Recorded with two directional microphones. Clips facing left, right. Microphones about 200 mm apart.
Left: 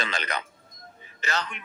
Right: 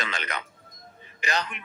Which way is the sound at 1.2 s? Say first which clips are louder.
Right 1 dB; 15° right (ahead or behind).